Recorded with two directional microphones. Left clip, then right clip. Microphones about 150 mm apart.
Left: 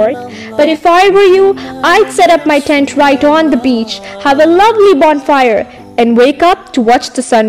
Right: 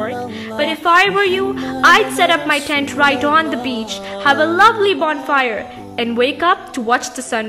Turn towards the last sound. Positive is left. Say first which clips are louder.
# left 9 dB
turn(degrees=35)  # may be behind; listen again after turning